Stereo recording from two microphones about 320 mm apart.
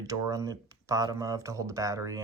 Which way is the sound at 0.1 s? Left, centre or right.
Centre.